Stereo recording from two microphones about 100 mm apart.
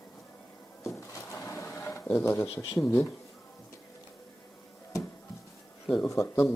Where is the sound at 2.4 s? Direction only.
80° left.